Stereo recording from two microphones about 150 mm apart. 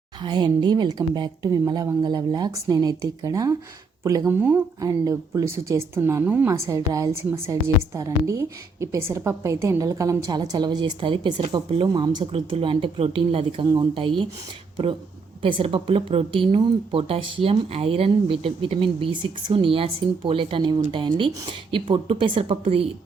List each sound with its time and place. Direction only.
0.2 s speech: 30° right (ahead or behind); by 4.6 s 10° right (ahead or behind)
4.8 s a woman's voice: 25° right (ahead or behind)
15.4 s a woman's voice: 35° right (ahead or behind)